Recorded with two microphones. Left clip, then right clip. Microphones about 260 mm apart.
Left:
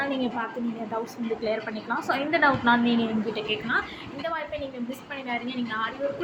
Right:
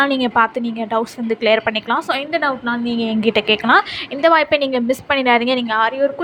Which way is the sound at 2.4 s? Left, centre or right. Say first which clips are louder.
Right 1 dB; right.